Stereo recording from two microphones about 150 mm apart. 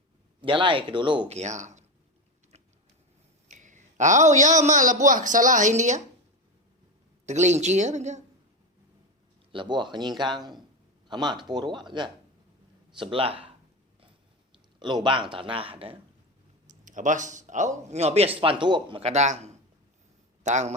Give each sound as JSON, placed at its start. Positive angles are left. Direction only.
{"t": 0.4, "sound": "a man's voice", "side_deg": -35}
{"t": 1.4, "sound": "speech", "side_deg": -50}
{"t": 3.5, "sound": "a man's voice", "side_deg": -55}
{"t": 7.3, "sound": "speech", "side_deg": -50}
{"t": 9.5, "sound": "a man's voice", "side_deg": -30}
{"t": 14.8, "sound": "a man's voice", "side_deg": -30}
{"t": 16.8, "sound": "speech", "side_deg": -55}
{"t": 18.6, "sound": "speech", "side_deg": -30}